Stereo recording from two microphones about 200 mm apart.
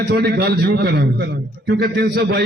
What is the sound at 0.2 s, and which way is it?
A man's voice, 55° right (ahead or behind).